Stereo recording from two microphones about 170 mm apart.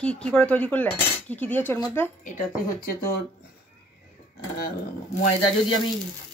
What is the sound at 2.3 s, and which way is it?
Speech, 50° left (ahead or behind).